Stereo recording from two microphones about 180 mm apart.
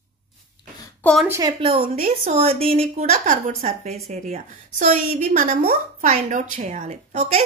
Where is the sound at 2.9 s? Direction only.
45° right (ahead or behind).